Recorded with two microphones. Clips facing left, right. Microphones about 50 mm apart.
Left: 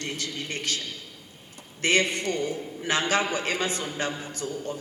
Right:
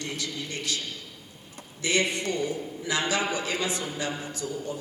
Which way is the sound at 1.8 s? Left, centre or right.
Left.